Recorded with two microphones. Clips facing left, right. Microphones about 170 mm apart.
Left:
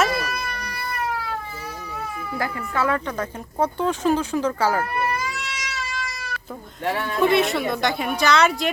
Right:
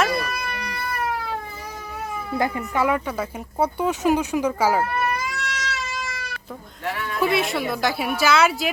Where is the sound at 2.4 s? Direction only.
20° right (ahead or behind).